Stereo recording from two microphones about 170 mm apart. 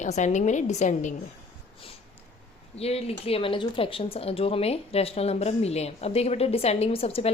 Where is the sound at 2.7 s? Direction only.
35° left (ahead or behind).